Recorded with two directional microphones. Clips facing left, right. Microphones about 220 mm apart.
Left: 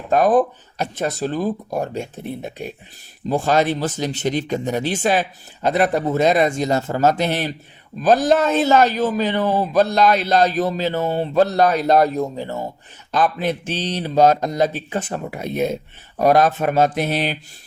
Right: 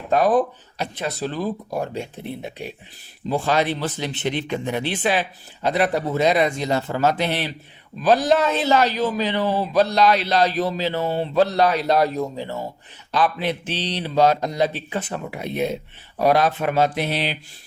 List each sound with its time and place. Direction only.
0.1 s speech: 45° left (ahead or behind)